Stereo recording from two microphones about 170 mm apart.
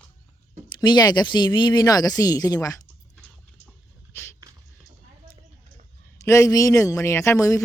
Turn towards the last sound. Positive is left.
turn(degrees=20)  # may be behind; listen again after turning